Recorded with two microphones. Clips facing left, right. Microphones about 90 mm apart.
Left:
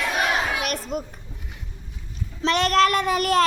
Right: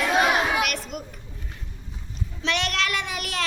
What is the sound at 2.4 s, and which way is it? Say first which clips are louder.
Child singing: left 8 dB; 40° left (ahead or behind).